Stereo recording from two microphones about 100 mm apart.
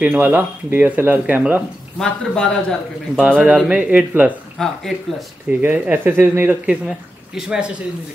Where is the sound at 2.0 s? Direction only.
10° left (ahead or behind).